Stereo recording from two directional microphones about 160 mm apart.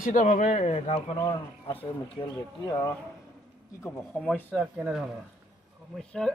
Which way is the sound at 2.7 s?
20° left (ahead or behind).